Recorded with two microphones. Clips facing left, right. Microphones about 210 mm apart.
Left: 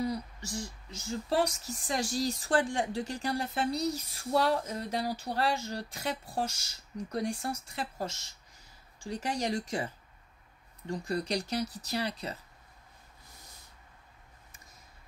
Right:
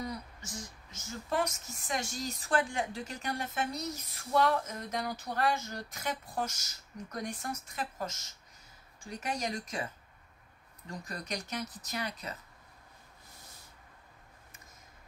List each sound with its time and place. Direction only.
0.0 s speech: 30° left (ahead or behind)